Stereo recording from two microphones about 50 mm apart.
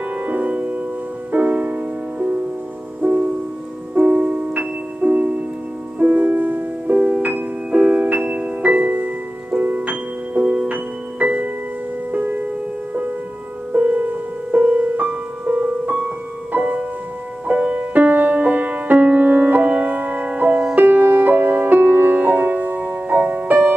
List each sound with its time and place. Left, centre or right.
0.2 s music: right
4.6 s music: right
7.0 s music: right
13.7 s music: right